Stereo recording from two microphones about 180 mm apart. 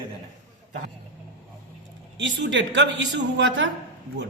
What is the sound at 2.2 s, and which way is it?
Speech, 85° right.